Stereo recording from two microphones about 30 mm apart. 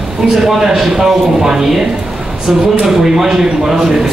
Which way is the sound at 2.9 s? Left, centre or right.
Centre.